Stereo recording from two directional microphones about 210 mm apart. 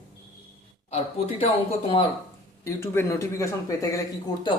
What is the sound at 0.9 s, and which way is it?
Speech, 30° left (ahead or behind).